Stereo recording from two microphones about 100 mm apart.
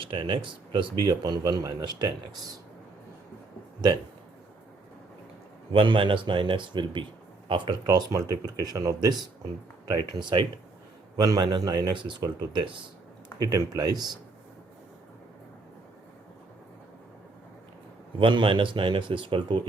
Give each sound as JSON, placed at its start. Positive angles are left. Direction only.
{"t": 0.0, "sound": "speech", "side_deg": -55}
{"t": 5.7, "sound": "speech", "side_deg": -60}
{"t": 7.9, "sound": "speech", "side_deg": -35}
{"t": 13.4, "sound": "speech", "side_deg": -40}
{"t": 18.2, "sound": "speech", "side_deg": -55}